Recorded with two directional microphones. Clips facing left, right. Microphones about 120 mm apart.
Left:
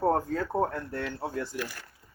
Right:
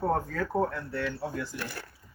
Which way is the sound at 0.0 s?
30° left (ahead or behind).